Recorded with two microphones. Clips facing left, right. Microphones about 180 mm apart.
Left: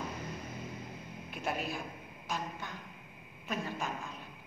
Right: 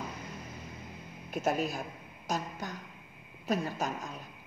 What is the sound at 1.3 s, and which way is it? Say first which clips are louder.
A woman's voice: right 6 dB; 40° right (ahead or behind).